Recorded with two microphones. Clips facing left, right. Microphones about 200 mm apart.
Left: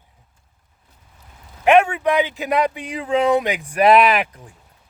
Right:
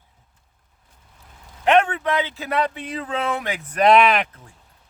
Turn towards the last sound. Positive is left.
turn(degrees=5)  # may be behind; listen again after turning